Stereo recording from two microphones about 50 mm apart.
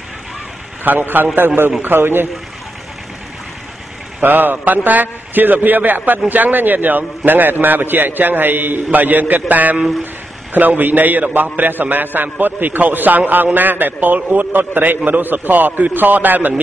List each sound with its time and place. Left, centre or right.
0.8 s a man's voice: right
4.2 s a man's voice: right